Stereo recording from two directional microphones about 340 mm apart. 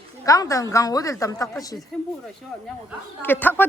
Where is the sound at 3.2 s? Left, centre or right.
Centre.